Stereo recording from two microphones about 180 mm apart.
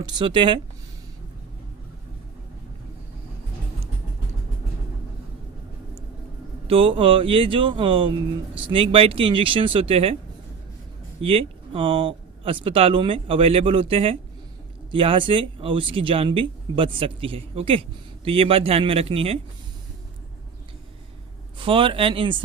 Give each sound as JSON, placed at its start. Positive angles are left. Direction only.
{"t": 0.0, "sound": "speech", "side_deg": -25}
{"t": 6.7, "sound": "speech", "side_deg": -30}
{"t": 11.2, "sound": "speech", "side_deg": -30}
{"t": 21.6, "sound": "speech", "side_deg": -30}